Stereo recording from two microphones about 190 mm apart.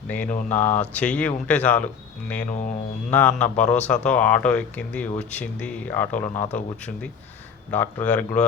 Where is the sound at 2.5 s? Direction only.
40° left (ahead or behind).